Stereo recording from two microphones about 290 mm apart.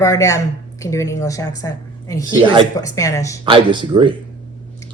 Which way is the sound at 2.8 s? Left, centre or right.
Centre.